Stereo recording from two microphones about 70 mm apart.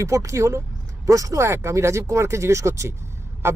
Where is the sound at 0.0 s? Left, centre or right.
Right.